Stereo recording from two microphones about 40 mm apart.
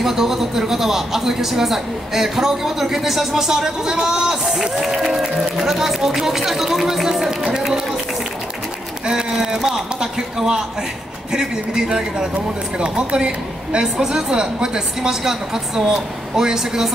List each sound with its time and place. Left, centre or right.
0.0 s a man's voice: centre
7.2 s chatter: centre
9.0 s a sound: centre
9.7 s a man's voice: centre